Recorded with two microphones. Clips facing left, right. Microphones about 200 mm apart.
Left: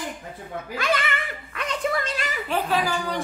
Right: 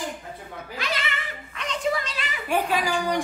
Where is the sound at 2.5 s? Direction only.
15° right (ahead or behind).